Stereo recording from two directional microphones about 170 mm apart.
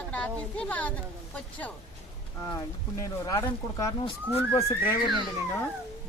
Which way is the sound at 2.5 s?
20° left (ahead or behind).